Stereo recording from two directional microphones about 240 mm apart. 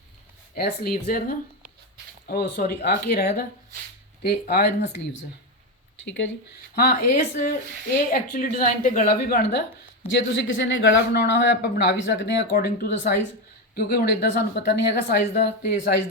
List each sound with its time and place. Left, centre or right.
0.5 s a woman's voice: left
6.1 s speech: left
7.1 s a woman's voice: left